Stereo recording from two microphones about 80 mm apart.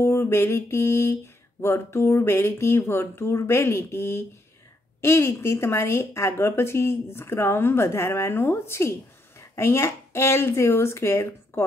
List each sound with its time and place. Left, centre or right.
0.0 s a woman's voice: left